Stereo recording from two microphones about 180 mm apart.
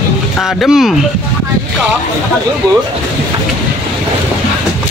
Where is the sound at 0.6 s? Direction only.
Centre (ahead or behind).